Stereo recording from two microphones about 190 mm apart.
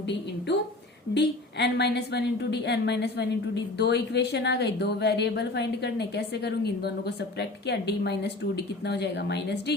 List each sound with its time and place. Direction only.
1.1 s a woman's voice: 65° left (ahead or behind)